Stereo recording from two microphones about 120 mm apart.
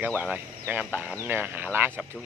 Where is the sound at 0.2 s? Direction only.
15° right (ahead or behind).